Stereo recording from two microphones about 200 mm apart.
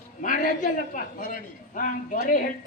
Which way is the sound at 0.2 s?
40° left (ahead or behind).